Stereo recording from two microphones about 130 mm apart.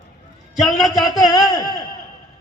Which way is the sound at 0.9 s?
30° left (ahead or behind).